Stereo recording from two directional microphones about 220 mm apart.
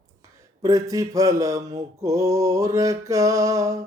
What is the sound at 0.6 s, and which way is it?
Mantra, 15° right (ahead or behind).